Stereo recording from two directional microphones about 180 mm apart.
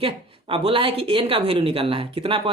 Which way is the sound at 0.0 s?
30° right (ahead or behind).